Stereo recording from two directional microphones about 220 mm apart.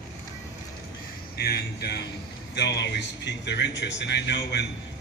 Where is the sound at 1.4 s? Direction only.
45° left (ahead or behind).